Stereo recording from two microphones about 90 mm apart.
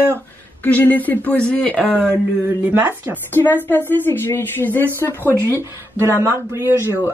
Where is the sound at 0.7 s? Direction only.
20° left (ahead or behind).